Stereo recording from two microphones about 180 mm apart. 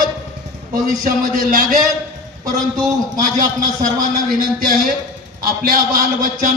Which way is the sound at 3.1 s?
45° right (ahead or behind).